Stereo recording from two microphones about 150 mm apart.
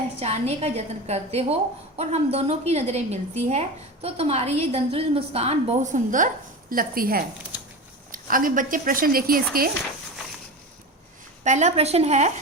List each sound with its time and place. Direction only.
0.2 s a woman's voice: 45° right (ahead or behind); by 9.4 s 75° right (ahead or behind)
11.4 s a woman's voice: 50° right (ahead or behind)